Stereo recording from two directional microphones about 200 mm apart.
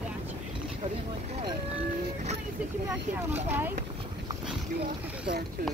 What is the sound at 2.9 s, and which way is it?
Speech, 10° right (ahead or behind).